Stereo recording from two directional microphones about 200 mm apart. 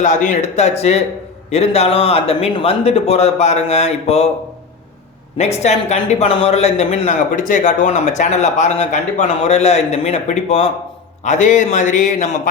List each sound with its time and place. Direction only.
0.0 s speech: 40° left (ahead or behind)
5.4 s speech: 35° left (ahead or behind)